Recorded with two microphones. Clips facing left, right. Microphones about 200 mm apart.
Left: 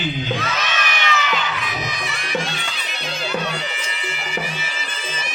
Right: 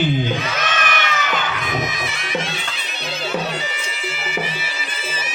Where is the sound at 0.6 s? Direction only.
50° right (ahead or behind).